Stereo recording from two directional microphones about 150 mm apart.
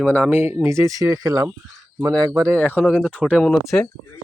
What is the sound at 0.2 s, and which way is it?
Speech, 15° right (ahead or behind).